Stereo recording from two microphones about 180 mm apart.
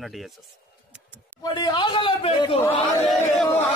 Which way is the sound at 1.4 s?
25° left (ahead or behind).